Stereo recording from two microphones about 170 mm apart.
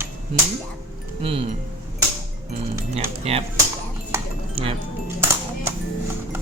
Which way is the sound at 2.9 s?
35° right (ahead or behind).